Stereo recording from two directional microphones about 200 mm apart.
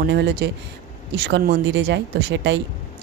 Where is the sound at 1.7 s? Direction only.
65° right (ahead or behind).